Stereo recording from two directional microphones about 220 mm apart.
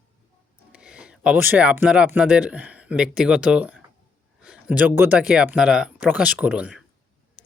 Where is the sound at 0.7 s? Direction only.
5° right (ahead or behind).